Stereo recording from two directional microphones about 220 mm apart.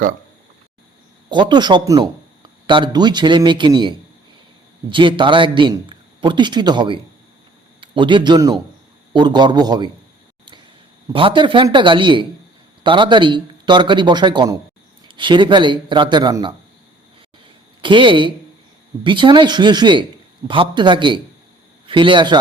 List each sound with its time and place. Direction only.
1.3 s a man's voice: 20° right (ahead or behind)
11.1 s speech: 25° right (ahead or behind)
17.7 s speech: 20° right (ahead or behind)